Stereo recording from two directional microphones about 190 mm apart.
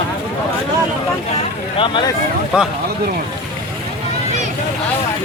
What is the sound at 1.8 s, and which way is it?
Speech, 25° left (ahead or behind).